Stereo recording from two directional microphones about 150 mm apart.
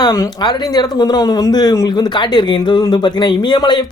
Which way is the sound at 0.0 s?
25° left (ahead or behind).